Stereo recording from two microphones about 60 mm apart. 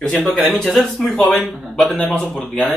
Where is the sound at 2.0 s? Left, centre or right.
Left.